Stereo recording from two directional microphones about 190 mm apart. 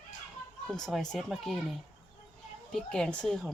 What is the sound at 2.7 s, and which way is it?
Speech, 5° left (ahead or behind).